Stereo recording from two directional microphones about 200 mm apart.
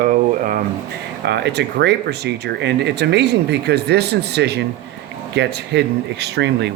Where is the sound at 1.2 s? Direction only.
55° right (ahead or behind).